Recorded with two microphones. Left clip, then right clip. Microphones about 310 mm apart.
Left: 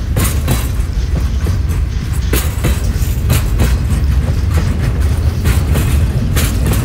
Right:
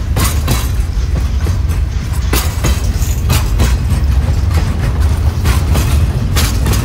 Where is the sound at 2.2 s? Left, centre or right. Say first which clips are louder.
Right 2 dB; centre.